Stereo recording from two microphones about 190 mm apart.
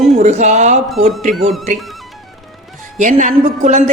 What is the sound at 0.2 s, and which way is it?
Speech, 35° right (ahead or behind).